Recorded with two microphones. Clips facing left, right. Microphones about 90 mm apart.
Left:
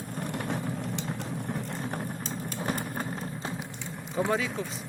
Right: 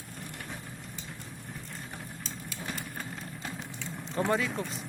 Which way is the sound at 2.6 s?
45° left (ahead or behind).